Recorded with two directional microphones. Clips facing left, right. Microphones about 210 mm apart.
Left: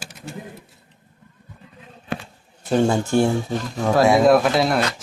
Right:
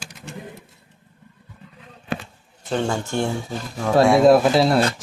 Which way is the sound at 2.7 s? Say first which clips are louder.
Left 5 dB; 10° left (ahead or behind).